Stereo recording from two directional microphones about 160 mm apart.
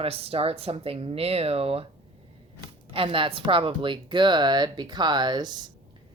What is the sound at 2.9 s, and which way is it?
Speech, 35° right (ahead or behind).